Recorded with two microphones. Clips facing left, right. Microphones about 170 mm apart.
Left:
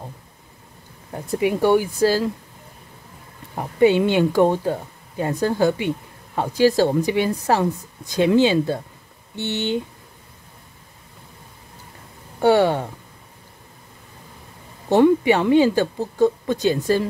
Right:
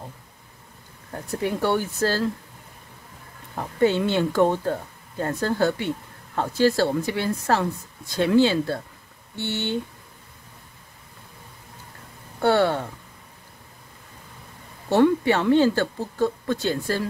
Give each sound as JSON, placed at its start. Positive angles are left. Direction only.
{"t": 1.1, "sound": "speech", "side_deg": 15}
{"t": 3.5, "sound": "speech", "side_deg": 15}
{"t": 12.4, "sound": "speech", "side_deg": 15}
{"t": 14.9, "sound": "speech", "side_deg": 15}